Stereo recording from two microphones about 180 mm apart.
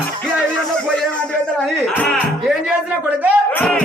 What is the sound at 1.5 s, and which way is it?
Speech, 5° left (ahead or behind).